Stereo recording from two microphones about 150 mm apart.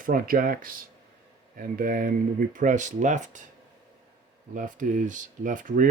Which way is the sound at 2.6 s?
55° right (ahead or behind).